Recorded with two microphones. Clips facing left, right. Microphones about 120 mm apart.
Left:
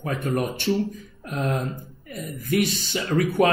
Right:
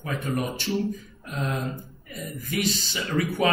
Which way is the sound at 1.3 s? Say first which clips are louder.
Left 4 dB; 45° left (ahead or behind).